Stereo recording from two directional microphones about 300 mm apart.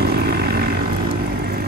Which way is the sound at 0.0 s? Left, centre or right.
Right.